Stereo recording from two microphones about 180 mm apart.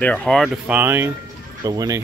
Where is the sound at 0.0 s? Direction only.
5° left (ahead or behind); by 2.0 s 20° right (ahead or behind).